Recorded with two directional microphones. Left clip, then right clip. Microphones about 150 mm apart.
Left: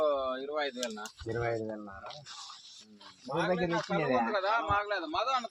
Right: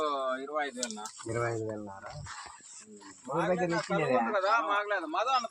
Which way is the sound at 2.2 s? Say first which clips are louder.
Right 3 dB; 40° right (ahead or behind).